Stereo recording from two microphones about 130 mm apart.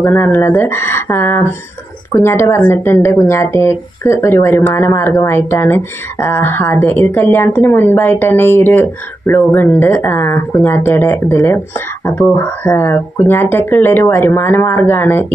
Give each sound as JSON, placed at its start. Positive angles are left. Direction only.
{"t": 0.0, "sound": "speech", "side_deg": 15}